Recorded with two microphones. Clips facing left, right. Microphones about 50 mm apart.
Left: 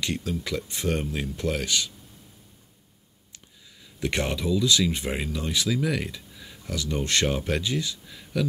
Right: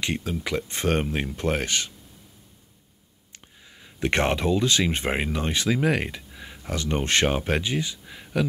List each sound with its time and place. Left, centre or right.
0.0 s speech: right
3.3 s speech: right